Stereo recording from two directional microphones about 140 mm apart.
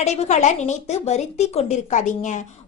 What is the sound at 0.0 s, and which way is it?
A woman's voice, 50° left (ahead or behind).